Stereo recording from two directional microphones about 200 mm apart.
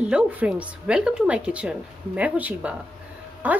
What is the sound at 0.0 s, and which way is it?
A woman's voice, 5° right (ahead or behind).